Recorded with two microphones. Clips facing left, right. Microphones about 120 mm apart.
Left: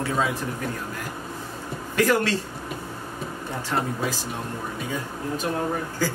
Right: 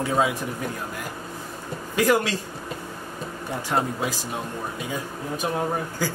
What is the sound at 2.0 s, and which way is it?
Speech, 15° right (ahead or behind).